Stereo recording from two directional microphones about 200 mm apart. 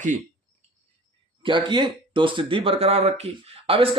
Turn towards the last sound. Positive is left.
turn(degrees=-30)  # may be behind; listen again after turning